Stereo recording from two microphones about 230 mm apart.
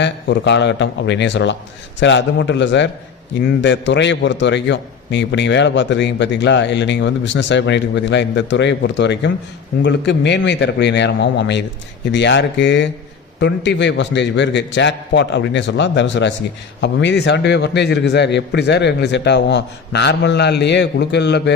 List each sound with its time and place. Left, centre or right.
0.0 s a man's voice: left